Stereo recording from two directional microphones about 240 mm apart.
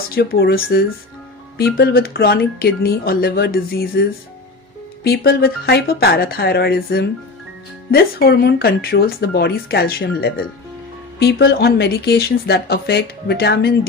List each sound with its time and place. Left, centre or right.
0.1 s speech: left
5.0 s speech: left